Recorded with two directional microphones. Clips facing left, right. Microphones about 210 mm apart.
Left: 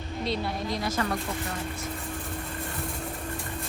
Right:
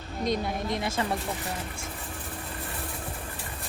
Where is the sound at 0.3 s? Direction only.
25° right (ahead or behind).